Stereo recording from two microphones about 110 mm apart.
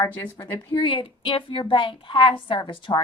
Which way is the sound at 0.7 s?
50° left (ahead or behind).